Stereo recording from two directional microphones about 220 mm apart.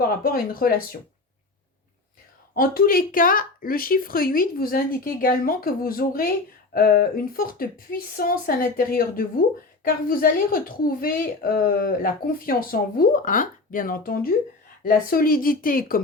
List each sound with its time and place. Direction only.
0.0 s a woman's voice: 40° left (ahead or behind)
2.6 s a woman's voice: 40° left (ahead or behind)